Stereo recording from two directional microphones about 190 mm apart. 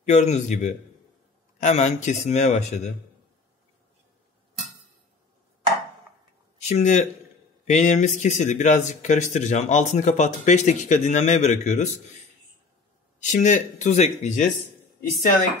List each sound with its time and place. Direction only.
0.1 s speech: 40° left (ahead or behind)
6.6 s a man's voice: 35° left (ahead or behind)
13.2 s speech: 40° left (ahead or behind)